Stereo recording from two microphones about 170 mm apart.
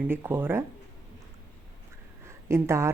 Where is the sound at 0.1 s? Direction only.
15° right (ahead or behind).